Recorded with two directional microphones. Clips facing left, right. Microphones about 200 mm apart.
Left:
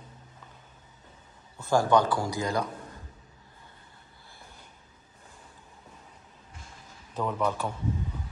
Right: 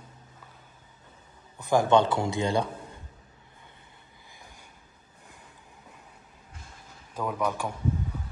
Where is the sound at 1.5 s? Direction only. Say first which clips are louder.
Right 1 dB; 15° right (ahead or behind).